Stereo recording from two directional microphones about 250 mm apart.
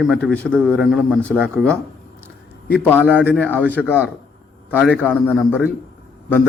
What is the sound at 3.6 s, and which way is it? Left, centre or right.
Speech, centre.